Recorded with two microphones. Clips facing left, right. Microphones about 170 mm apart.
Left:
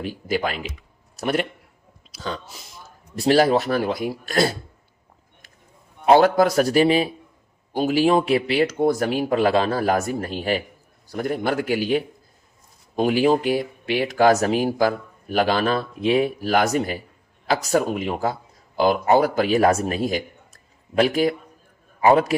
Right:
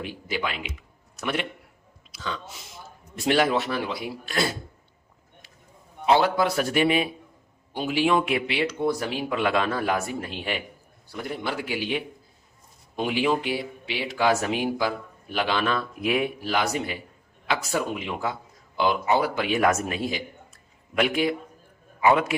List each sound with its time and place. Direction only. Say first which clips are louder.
0.0 s a man's voice: left 6 dB; 40° left (ahead or behind)
6.1 s speech: left 6 dB; 45° left (ahead or behind)